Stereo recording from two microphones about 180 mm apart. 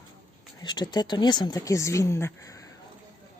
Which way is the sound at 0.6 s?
25° left (ahead or behind).